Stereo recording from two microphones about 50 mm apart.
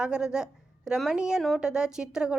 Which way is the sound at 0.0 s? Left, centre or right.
Centre.